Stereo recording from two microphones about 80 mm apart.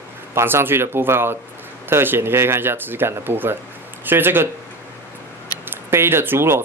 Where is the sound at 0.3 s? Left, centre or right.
Right.